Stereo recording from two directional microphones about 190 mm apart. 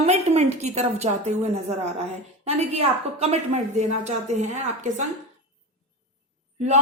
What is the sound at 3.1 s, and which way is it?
A woman's voice, 35° right (ahead or behind).